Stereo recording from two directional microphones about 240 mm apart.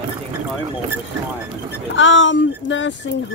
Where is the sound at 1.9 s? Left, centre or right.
Left.